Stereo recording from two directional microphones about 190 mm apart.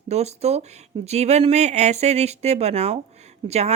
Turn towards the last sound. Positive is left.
turn(degrees=-35)  # may be behind; listen again after turning